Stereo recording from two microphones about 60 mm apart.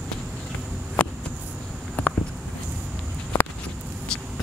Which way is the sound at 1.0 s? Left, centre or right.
Centre.